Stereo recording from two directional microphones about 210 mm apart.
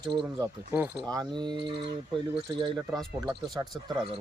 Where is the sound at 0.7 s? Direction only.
Centre (ahead or behind).